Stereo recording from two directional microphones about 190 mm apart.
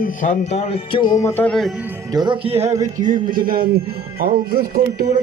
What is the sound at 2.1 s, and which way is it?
Music, 25° right (ahead or behind).